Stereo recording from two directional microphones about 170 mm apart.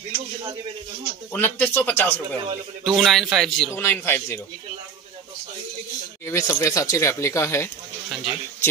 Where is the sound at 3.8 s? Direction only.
15° left (ahead or behind).